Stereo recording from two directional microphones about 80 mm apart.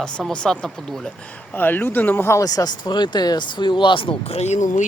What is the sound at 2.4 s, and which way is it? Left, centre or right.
Speech, left.